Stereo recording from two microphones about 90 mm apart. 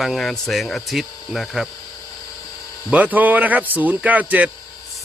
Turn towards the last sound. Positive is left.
turn(degrees=-15)  # may be behind; listen again after turning